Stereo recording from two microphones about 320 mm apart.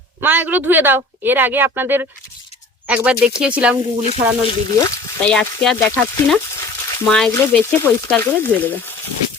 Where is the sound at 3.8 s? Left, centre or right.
Left.